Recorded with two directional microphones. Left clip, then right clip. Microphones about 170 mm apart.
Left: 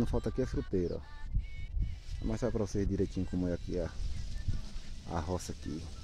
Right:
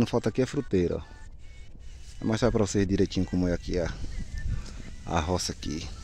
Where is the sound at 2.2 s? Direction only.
55° right (ahead or behind); by 4.0 s 30° right (ahead or behind).